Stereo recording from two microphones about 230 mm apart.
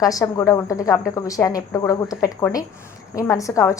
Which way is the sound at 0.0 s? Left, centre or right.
Centre.